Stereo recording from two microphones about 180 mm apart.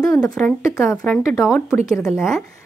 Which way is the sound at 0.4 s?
Centre (ahead or behind).